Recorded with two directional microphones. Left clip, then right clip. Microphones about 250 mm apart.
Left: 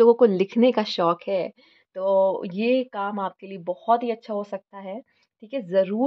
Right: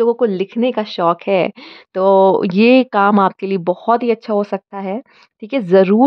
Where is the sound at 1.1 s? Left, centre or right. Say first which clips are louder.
Right 10 dB; right.